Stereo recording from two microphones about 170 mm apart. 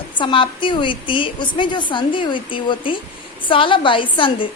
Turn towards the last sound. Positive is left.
turn(degrees=30)  # may be behind; listen again after turning